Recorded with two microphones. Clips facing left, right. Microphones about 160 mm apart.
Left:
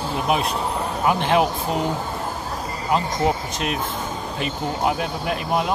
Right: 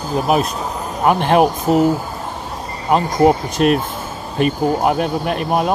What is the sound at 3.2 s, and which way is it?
Speech, 55° right (ahead or behind).